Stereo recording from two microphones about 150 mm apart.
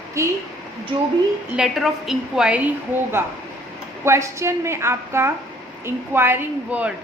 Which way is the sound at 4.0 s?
20° right (ahead or behind).